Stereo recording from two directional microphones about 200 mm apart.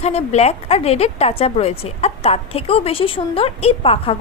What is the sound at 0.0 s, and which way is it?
A woman's voice, 30° left (ahead or behind).